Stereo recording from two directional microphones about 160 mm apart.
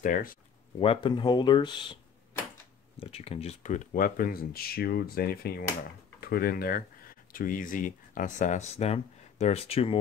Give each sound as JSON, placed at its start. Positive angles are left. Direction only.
{"t": 0.0, "sound": "speech", "side_deg": 60}
{"t": 0.7, "sound": "speech", "side_deg": 30}
{"t": 3.0, "sound": "speech", "side_deg": 40}